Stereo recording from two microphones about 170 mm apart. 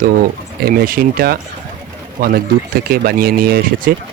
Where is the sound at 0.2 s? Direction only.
60° right (ahead or behind).